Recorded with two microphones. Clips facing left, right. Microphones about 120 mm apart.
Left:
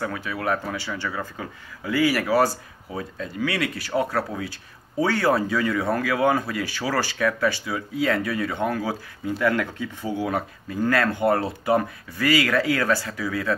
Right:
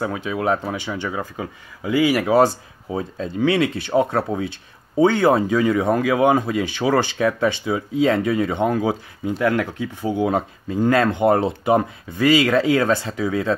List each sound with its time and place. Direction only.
0.0 s speech: 20° right (ahead or behind)